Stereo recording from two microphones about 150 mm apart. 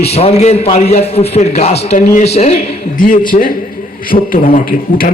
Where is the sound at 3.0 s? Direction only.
65° left (ahead or behind).